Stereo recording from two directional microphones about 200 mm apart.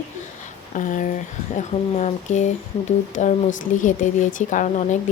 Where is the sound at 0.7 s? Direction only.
40° left (ahead or behind).